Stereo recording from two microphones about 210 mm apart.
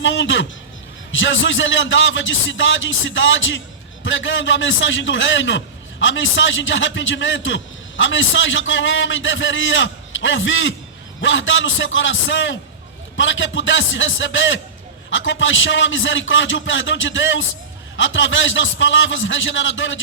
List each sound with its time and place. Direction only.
0.0 s a man's voice: 60° left (ahead or behind)